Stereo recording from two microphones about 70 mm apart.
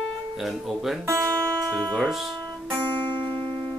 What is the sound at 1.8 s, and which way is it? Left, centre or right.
Speech, centre.